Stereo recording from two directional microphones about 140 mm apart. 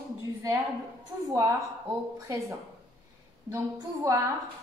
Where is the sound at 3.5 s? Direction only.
25° right (ahead or behind).